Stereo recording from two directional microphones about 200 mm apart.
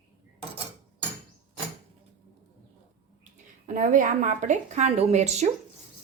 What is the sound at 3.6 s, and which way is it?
A woman's voice, 40° right (ahead or behind).